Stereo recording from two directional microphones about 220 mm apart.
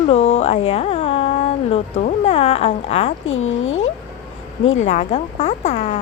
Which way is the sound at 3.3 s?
65° left (ahead or behind).